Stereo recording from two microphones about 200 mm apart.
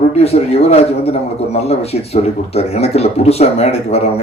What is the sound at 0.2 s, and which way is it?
Speech, 30° left (ahead or behind).